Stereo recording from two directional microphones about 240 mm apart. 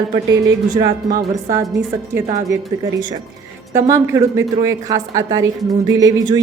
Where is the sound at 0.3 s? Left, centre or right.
Centre.